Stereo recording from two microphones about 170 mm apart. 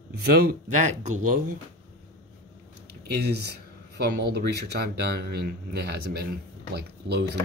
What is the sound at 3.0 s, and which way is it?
Speech, 75° right (ahead or behind).